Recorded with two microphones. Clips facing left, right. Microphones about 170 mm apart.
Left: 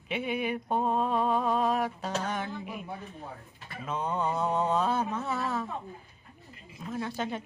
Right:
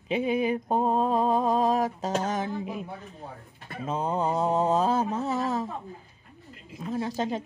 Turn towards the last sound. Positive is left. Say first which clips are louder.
# right 4 dB
turn(degrees=-35)  # may be behind; listen again after turning